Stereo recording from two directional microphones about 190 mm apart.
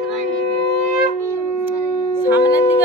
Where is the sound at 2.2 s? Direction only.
10° right (ahead or behind).